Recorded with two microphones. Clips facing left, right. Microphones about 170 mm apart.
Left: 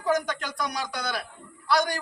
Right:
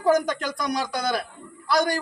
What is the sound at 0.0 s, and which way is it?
A man's voice, 40° right (ahead or behind).